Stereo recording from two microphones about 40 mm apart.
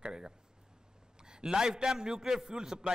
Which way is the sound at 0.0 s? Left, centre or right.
Centre.